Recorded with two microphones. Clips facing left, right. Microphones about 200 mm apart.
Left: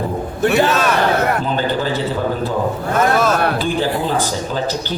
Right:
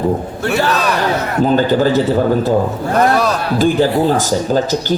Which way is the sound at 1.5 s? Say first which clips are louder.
Right 7 dB; 45° right (ahead or behind).